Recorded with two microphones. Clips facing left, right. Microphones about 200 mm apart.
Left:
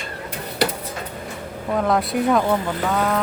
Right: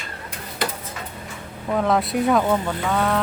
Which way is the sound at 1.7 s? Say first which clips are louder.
Even; centre (ahead or behind).